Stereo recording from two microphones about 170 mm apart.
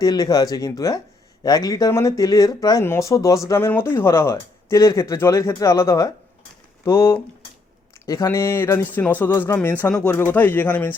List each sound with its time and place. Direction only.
0.0 s speech: 20° left (ahead or behind)